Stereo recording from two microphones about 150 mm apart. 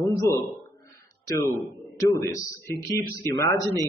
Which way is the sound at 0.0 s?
20° left (ahead or behind).